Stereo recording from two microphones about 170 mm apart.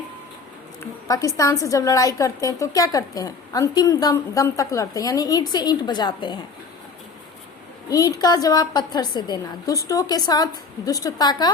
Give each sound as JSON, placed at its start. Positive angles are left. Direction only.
{"t": 1.0, "sound": "a woman's voice", "side_deg": 20}
{"t": 7.9, "sound": "a woman's voice", "side_deg": 20}